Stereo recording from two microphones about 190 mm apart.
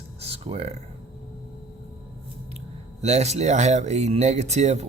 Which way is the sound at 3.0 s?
35° right (ahead or behind).